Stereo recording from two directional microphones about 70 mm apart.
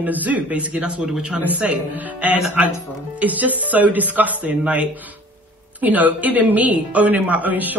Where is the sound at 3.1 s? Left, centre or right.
Right.